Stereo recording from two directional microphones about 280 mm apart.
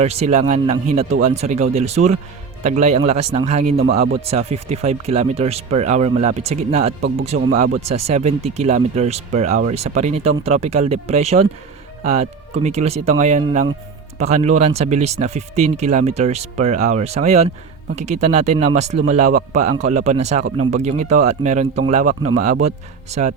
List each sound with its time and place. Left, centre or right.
0.3 s speech: right